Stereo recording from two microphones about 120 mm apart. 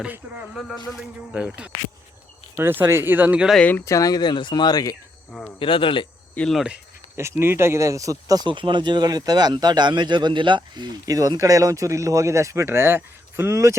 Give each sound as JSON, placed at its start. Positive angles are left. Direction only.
{"t": 0.0, "sound": "speech", "side_deg": -10}
{"t": 3.7, "sound": "speech", "side_deg": 20}
{"t": 5.5, "sound": "speech", "side_deg": 45}
{"t": 6.3, "sound": "speech", "side_deg": 5}
{"t": 7.2, "sound": "speech", "side_deg": -20}
{"t": 8.4, "sound": "speech", "side_deg": -40}